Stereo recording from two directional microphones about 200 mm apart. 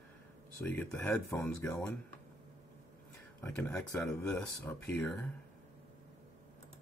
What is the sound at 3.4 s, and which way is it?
Speech, 10° left (ahead or behind).